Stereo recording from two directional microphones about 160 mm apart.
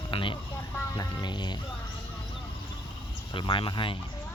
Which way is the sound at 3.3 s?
30° left (ahead or behind).